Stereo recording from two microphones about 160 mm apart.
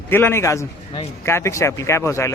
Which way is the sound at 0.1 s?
15° left (ahead or behind).